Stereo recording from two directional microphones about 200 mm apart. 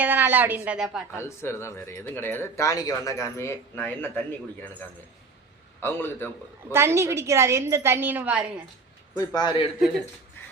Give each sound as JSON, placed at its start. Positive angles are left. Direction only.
{"t": 0.0, "sound": "a woman's voice", "side_deg": -10}
{"t": 1.1, "sound": "speech", "side_deg": 15}
{"t": 5.8, "sound": "speech", "side_deg": 10}
{"t": 6.7, "sound": "a woman's voice", "side_deg": -15}
{"t": 9.1, "sound": "a man's voice", "side_deg": 20}